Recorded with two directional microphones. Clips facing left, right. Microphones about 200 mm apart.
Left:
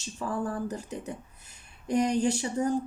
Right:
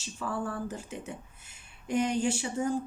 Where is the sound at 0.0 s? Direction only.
40° left (ahead or behind).